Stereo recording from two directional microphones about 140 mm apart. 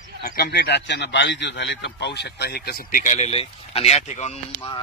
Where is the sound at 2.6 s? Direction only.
85° left; by 4.3 s 55° left (ahead or behind).